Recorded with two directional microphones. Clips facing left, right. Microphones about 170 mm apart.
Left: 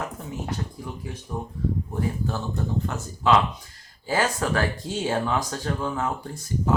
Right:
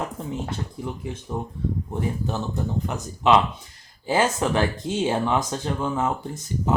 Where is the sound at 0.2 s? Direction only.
25° right (ahead or behind).